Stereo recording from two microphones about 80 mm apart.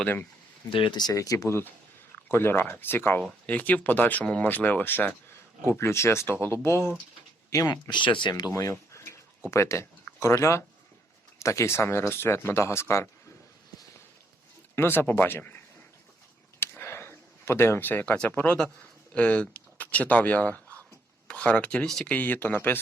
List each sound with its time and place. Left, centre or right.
0.8 s speech: left
1.1 s speech: left
2.1 s speech: left
7.7 s speech: left
8.4 s speech: left
8.9 s a sound: left
9.5 s speech: left
14.8 s speech: left
16.6 s a sound: left
18.8 s speech: centre